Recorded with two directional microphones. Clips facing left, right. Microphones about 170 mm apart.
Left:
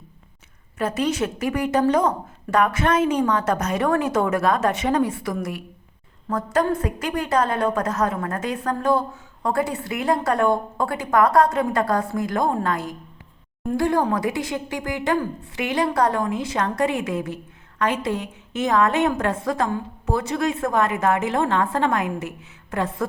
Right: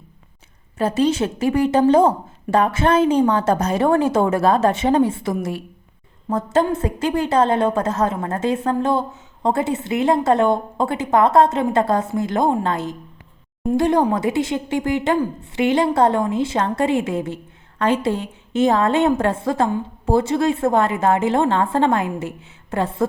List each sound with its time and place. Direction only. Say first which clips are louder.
0.8 s speech: right 4 dB; 30° right (ahead or behind)